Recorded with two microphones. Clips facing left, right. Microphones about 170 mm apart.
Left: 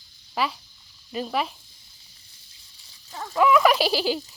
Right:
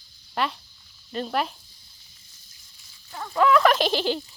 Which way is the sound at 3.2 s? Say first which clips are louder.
Even; 5° left (ahead or behind).